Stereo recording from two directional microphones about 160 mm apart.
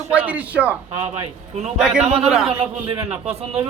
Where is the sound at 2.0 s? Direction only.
40° right (ahead or behind).